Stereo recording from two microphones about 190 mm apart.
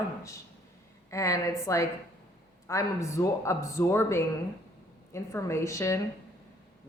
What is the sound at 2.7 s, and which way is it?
A woman's voice, 15° left (ahead or behind).